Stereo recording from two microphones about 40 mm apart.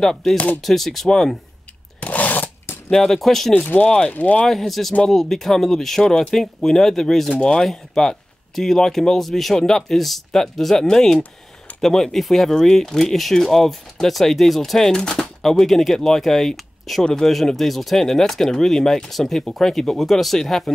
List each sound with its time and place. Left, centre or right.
0.0 s speech: centre
2.0 s a sound: left
2.9 s speech: centre
3.6 s speech: left
4.5 s speech: centre
7.3 s speech: centre